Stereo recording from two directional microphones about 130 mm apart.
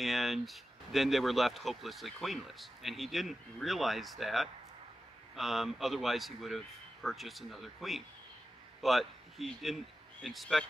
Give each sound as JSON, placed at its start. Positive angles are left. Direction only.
{"t": 0.0, "sound": "speech", "side_deg": 0}